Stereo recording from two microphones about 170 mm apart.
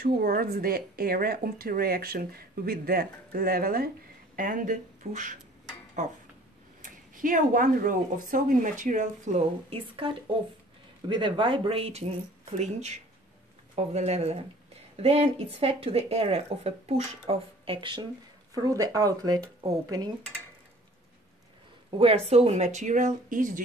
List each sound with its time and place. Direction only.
0.2 s speech: 60° right (ahead or behind); by 19.4 s 20° right (ahead or behind)
21.9 s speech: 35° right (ahead or behind); by 23.6 s 50° right (ahead or behind)